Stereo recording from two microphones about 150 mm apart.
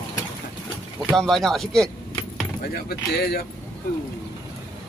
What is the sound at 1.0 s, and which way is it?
Speech, centre (ahead or behind).